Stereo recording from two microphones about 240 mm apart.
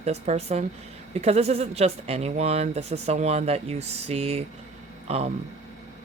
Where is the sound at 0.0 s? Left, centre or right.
Right.